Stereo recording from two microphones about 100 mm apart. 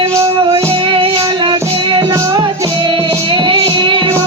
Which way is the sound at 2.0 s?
35° right (ahead or behind).